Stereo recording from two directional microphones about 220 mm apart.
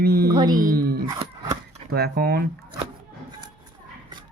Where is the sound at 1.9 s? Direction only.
45° right (ahead or behind).